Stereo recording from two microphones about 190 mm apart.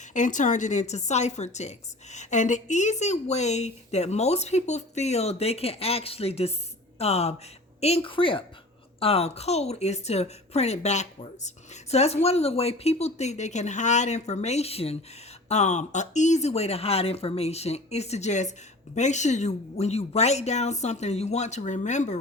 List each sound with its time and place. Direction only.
0.0 s a woman's voice: 40° left (ahead or behind)